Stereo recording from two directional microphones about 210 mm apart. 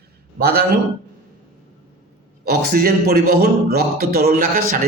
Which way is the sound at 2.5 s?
50° right (ahead or behind).